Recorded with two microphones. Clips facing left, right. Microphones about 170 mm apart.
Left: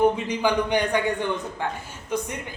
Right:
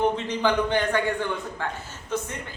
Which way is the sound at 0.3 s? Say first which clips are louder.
Left 1 dB; 15° left (ahead or behind).